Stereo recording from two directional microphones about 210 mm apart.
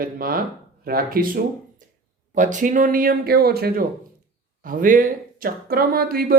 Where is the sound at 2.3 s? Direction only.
35° right (ahead or behind).